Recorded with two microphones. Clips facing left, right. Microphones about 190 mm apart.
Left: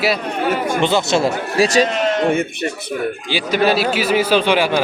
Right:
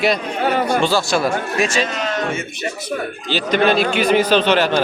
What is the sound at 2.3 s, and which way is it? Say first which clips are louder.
Speech: left 7 dB; 60° left (ahead or behind).